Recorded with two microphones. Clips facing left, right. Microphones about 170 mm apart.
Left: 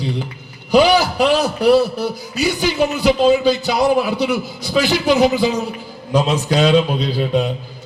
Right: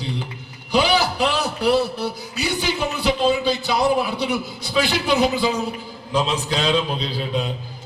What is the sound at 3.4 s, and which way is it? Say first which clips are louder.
A man's voice: left 4 dB; 45° left (ahead or behind).